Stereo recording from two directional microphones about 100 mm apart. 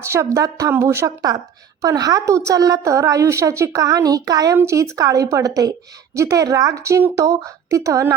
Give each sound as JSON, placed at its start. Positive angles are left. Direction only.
{"t": 0.0, "sound": "a woman's voice", "side_deg": -30}